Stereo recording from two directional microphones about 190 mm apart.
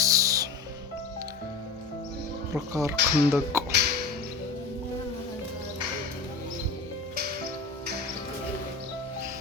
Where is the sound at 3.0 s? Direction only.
65° right (ahead or behind).